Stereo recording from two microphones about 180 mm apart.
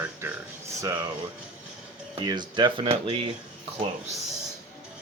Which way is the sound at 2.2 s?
25° right (ahead or behind).